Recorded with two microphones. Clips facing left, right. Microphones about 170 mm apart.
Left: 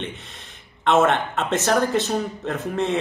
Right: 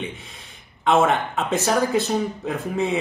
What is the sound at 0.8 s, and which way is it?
Speech, 5° right (ahead or behind).